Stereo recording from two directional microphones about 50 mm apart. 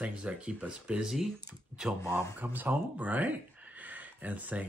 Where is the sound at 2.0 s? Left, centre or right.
Left.